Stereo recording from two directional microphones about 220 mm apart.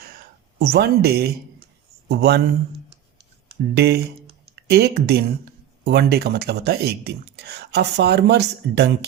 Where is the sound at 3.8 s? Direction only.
45° right (ahead or behind).